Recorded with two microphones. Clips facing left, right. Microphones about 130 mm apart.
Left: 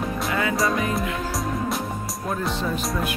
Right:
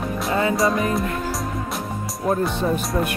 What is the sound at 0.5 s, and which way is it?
Speech, centre (ahead or behind).